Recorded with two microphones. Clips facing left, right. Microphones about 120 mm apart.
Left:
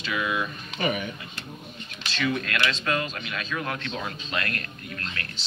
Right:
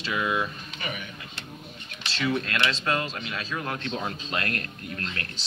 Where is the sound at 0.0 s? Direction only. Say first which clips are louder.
Right 1 dB; 30° right (ahead or behind).